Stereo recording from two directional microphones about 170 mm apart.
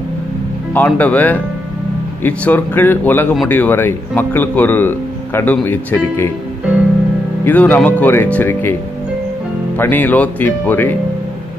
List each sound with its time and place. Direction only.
0.7 s speech: 10° left (ahead or behind)
7.4 s speech: 10° left (ahead or behind)
9.8 s speech: 10° left (ahead or behind)